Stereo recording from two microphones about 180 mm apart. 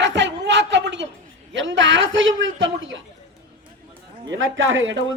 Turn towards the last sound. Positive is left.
turn(degrees=-90)